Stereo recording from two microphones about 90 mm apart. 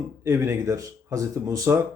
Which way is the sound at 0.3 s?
30° right (ahead or behind).